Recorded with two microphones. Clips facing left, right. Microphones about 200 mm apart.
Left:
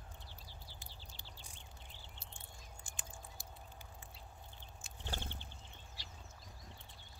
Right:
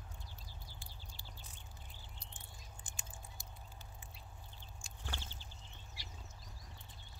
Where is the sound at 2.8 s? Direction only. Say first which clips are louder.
Left 1 dB; 20° right (ahead or behind).